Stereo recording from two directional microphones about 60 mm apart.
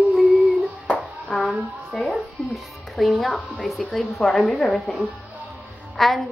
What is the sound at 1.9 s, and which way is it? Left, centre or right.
A woman's voice, centre.